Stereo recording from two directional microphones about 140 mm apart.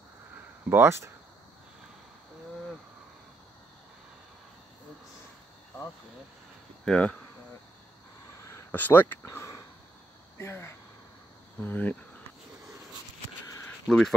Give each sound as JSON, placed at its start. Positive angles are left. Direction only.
{"t": 0.7, "sound": "speech", "side_deg": -15}
{"t": 6.8, "sound": "speech", "side_deg": 10}
{"t": 8.5, "sound": "speech", "side_deg": 15}
{"t": 10.3, "sound": "a sound", "side_deg": 20}
{"t": 11.6, "sound": "speech", "side_deg": 10}
{"t": 13.7, "sound": "a sound", "side_deg": 5}